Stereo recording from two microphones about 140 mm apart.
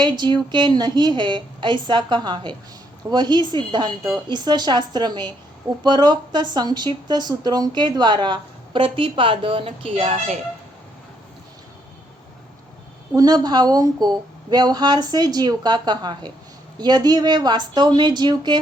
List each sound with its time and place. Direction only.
0.0 s speech: 35° right (ahead or behind)
13.1 s speech: 25° right (ahead or behind)